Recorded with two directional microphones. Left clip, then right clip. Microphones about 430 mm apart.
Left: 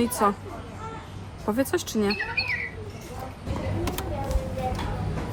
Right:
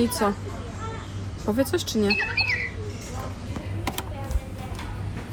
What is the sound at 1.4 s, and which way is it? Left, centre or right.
Speech, centre.